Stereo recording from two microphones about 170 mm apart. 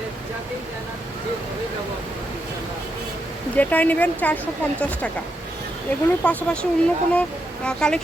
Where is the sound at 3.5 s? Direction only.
10° left (ahead or behind).